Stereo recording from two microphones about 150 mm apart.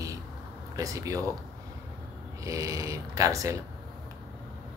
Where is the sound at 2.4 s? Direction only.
20° right (ahead or behind).